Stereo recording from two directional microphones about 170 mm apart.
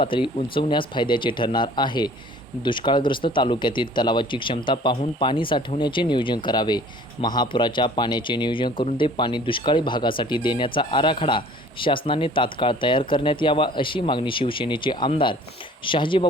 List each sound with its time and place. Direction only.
0.0 s speech: 30° left (ahead or behind)